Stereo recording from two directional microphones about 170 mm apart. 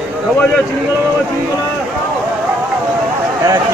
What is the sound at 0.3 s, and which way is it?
Speech, 5° left (ahead or behind).